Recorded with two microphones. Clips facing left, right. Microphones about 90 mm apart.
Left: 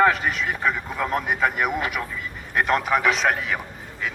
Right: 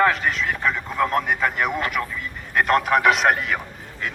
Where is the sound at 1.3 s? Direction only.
5° left (ahead or behind).